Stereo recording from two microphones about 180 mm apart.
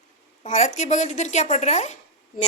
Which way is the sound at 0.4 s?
40° left (ahead or behind).